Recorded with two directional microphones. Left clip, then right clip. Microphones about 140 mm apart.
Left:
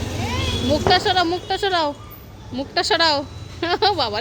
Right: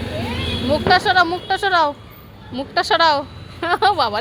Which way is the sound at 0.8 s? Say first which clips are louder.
Right 3 dB; 10° left (ahead or behind).